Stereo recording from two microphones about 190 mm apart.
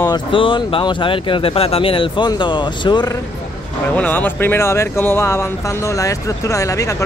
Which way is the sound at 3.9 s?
10° left (ahead or behind).